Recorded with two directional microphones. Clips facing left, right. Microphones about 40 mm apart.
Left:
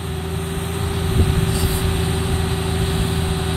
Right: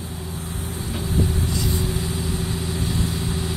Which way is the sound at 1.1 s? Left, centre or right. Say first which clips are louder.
Left 2 dB; left.